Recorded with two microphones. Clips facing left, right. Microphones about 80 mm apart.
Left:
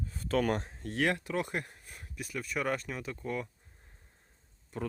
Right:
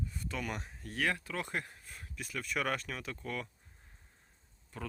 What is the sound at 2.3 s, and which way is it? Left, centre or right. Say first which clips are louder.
Speech: left 2 dB; centre.